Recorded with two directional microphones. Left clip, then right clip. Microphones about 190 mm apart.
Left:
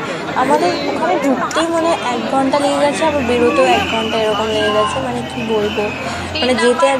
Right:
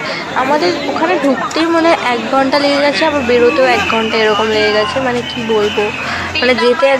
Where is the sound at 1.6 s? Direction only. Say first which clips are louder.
Right 6 dB; 40° right (ahead or behind).